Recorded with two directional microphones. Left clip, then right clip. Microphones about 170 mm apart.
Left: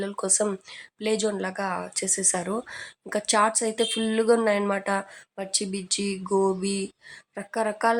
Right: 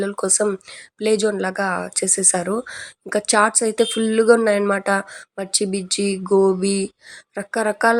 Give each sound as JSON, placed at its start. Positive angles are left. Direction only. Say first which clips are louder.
{"t": 0.0, "sound": "speech", "louder": "right 6 dB", "side_deg": -20}